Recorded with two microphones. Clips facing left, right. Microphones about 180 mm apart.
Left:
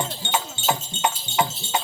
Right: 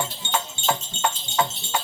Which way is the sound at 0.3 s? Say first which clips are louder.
Left 1 dB; 10° left (ahead or behind).